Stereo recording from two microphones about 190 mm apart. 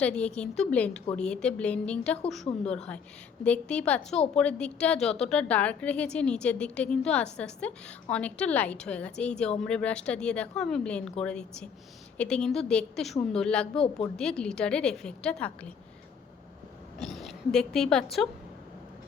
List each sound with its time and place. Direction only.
0.0 s a woman's voice: 5° left (ahead or behind)
2.5 s a woman's voice: 25° left (ahead or behind)
3.4 s a woman's voice: 5° left (ahead or behind)
13.7 s a woman's voice: 30° left (ahead or behind)
14.2 s a woman's voice: 5° left (ahead or behind)
17.0 s a woman's voice: centre (ahead or behind)